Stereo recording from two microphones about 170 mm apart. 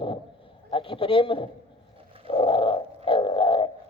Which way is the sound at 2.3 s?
30° left (ahead or behind).